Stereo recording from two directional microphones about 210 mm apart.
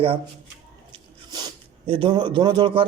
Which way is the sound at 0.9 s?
20° right (ahead or behind).